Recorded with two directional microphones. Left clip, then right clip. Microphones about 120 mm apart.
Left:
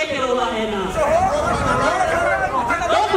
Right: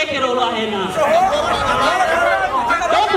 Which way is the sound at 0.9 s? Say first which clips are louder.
Right 3 dB; 25° right (ahead or behind).